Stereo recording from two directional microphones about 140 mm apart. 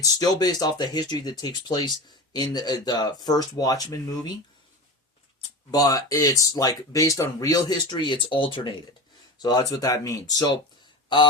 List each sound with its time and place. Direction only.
0.0 s speech: 25° left (ahead or behind)
5.7 s speech: 25° left (ahead or behind)